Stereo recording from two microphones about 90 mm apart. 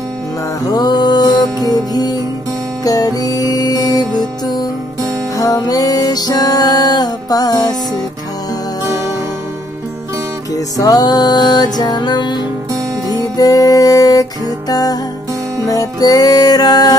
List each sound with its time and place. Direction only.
0.7 s music: 50° left (ahead or behind)
5.4 s music: 40° left (ahead or behind)
10.5 s music: 40° left (ahead or behind)
13.4 s music: 40° left (ahead or behind)